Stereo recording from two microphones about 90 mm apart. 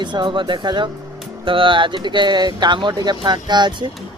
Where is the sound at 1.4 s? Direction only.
75° right (ahead or behind).